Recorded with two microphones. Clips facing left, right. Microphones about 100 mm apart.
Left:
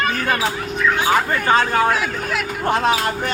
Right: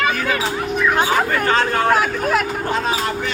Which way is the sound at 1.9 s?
50° right (ahead or behind).